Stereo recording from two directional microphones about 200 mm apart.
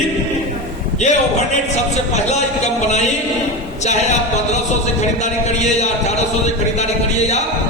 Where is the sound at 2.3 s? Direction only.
35° left (ahead or behind).